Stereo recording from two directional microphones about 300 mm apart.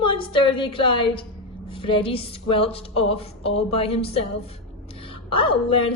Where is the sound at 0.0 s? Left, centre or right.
Centre.